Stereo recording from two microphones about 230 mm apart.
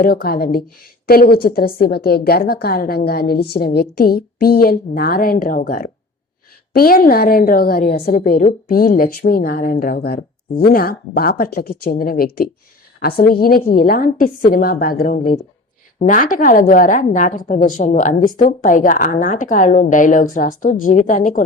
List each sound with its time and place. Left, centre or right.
0.0 s a woman's voice: left